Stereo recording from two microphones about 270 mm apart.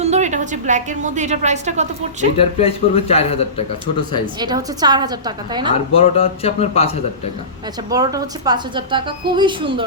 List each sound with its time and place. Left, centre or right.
0.0 s a woman's voice: right
2.4 s a man's voice: left
4.4 s a woman's voice: centre
5.7 s a man's voice: left
7.9 s a woman's voice: centre